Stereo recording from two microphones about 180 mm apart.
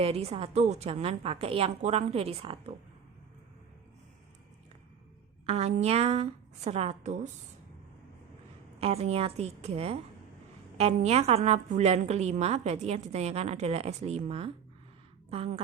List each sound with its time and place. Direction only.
0.0 s a woman's voice: 35° right (ahead or behind)
5.5 s a woman's voice: 35° right (ahead or behind)
8.8 s a woman's voice: 35° right (ahead or behind)